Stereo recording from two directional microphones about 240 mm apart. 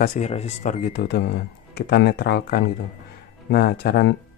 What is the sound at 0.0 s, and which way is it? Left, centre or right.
Speech, left.